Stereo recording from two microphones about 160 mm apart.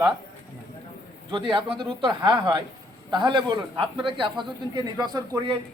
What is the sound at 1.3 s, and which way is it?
A man's voice, 30° right (ahead or behind).